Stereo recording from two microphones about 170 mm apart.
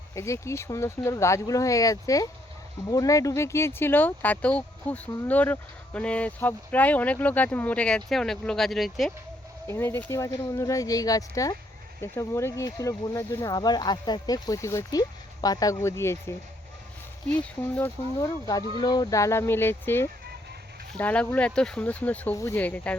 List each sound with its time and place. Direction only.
0.1 s speech: 15° left (ahead or behind); by 9.1 s centre (ahead or behind)
9.6 s speech: 15° left (ahead or behind)
17.7 s speech: 10° left (ahead or behind)
18.4 s speech: 20° left (ahead or behind)